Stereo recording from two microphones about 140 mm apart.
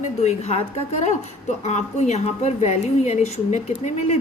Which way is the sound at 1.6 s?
50° left (ahead or behind).